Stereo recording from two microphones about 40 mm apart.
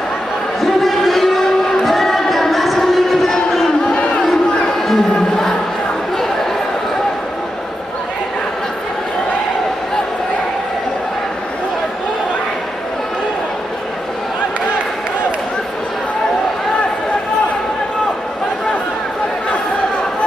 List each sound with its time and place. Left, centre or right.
0.7 s a sound: centre
3.9 s crowd: left
4.2 s crowd: centre